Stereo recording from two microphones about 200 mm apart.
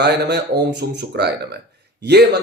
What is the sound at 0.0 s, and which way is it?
Speech, 60° right (ahead or behind).